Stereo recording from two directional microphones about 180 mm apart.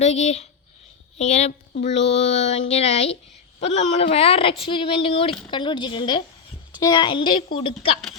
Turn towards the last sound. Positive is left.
turn(degrees=30)  # may be behind; listen again after turning